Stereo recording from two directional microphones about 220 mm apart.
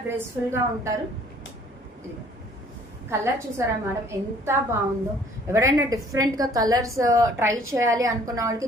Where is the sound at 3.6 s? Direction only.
15° right (ahead or behind).